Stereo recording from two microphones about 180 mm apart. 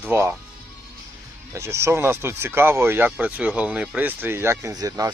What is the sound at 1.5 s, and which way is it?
Speech, 15° right (ahead or behind).